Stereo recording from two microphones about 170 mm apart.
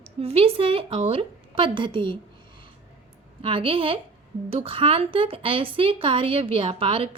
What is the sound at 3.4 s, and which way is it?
A woman's voice, 30° right (ahead or behind).